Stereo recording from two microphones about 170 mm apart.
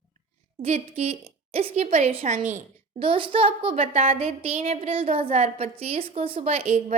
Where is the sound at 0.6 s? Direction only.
40° right (ahead or behind).